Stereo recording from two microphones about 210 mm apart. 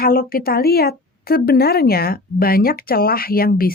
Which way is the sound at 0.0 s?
45° left (ahead or behind).